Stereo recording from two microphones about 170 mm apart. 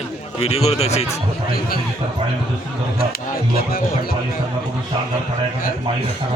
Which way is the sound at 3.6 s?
60° left (ahead or behind).